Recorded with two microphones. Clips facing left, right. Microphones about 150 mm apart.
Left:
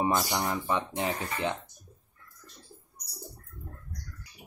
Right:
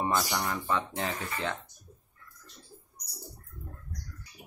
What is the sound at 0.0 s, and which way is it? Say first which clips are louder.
Speech: left 2 dB; 20° left (ahead or behind).